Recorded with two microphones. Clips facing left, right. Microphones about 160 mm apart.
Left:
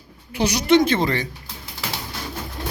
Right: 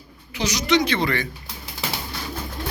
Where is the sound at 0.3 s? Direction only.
55° left (ahead or behind); by 1.3 s 40° left (ahead or behind).